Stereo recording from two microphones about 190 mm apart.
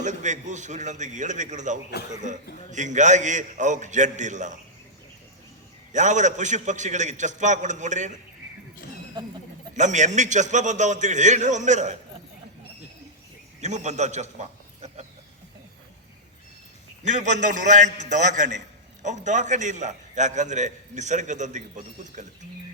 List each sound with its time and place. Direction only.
0.0 s a man's voice: 40° right (ahead or behind)
5.9 s a man's voice: 40° right (ahead or behind)
9.7 s a man's voice: 40° right (ahead or behind)
13.6 s a man's voice: 40° right (ahead or behind)
17.0 s a man's voice: 40° right (ahead or behind)